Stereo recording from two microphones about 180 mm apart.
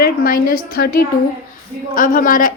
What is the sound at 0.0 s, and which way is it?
A woman's voice, 55° left (ahead or behind).